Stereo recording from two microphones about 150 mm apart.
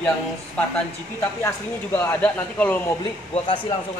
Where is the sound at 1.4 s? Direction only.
15° left (ahead or behind).